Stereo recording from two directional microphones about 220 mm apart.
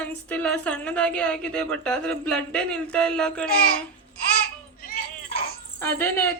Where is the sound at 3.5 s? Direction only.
40° left (ahead or behind).